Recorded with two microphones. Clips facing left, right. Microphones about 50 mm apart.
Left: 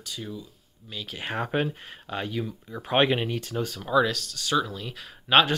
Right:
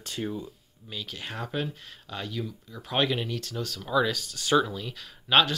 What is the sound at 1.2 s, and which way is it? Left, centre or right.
Speech, left.